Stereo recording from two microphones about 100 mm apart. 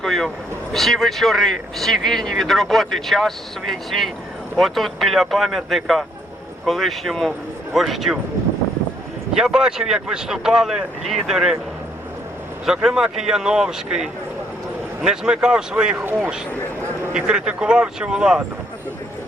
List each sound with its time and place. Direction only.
0.0 s speech: 5° left (ahead or behind)
9.3 s speech: 5° right (ahead or behind)
12.6 s speech: 5° right (ahead or behind)
17.2 s speech: 10° right (ahead or behind)